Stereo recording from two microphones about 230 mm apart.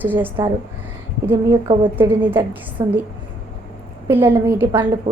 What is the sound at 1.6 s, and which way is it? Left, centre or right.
Speech, right.